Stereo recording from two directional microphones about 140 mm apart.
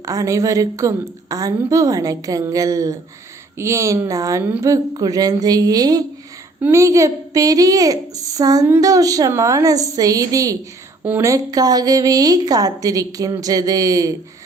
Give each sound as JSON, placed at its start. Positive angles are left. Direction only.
{"t": 0.0, "sound": "a woman's voice", "side_deg": -25}
{"t": 11.0, "sound": "speech", "side_deg": -10}
{"t": 11.3, "sound": "a woman's voice", "side_deg": -25}